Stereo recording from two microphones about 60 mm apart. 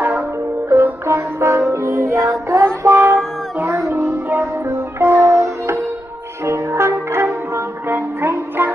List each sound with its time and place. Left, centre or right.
1.0 s music: right
4.3 s music: right